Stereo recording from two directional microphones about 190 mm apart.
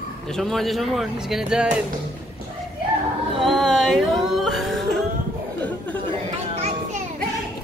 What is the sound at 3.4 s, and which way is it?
Music, centre (ahead or behind).